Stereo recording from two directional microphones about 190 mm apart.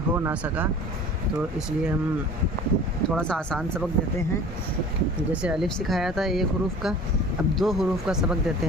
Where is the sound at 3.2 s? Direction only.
5° left (ahead or behind).